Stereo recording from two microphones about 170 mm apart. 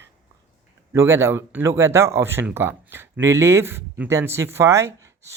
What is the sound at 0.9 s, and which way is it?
Speech, 15° right (ahead or behind).